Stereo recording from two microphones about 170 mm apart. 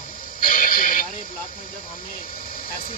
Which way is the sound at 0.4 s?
55° left (ahead or behind).